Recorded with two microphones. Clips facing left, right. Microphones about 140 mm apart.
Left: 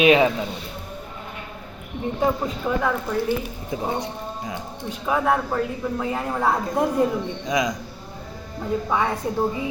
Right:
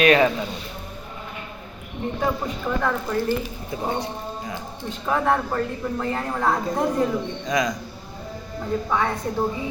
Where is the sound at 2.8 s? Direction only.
5° left (ahead or behind).